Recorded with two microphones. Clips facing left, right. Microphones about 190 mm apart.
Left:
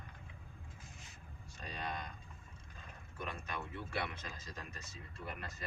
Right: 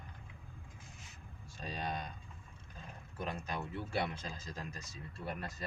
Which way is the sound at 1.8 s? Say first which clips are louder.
Right 3 dB; 30° right (ahead or behind).